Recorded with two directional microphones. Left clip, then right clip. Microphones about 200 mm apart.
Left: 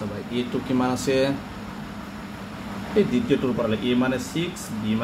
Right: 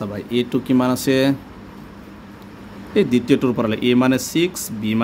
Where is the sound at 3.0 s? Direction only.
60° right (ahead or behind).